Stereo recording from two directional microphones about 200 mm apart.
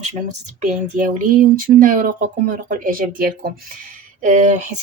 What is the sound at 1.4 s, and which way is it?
Speech, 40° right (ahead or behind).